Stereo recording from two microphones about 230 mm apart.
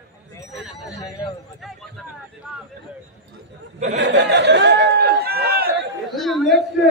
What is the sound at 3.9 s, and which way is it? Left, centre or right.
Chatter, right.